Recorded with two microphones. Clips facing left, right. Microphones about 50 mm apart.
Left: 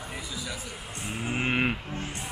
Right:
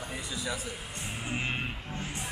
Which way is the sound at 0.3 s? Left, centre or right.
Centre.